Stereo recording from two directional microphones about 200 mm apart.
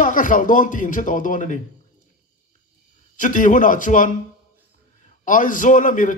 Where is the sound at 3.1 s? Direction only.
40° left (ahead or behind).